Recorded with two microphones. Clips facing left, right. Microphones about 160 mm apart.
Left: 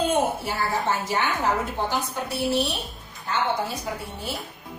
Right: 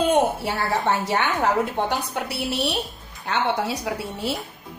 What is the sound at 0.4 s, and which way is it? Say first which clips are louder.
A woman's voice: right 2 dB; 70° right (ahead or behind).